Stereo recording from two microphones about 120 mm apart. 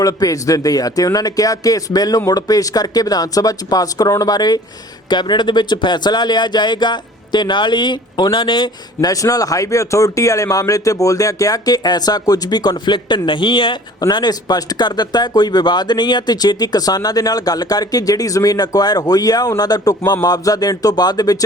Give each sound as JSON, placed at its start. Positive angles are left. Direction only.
{"t": 0.0, "sound": "speech", "side_deg": 30}